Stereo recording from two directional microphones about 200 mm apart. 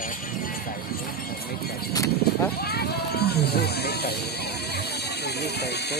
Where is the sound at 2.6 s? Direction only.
50° left (ahead or behind).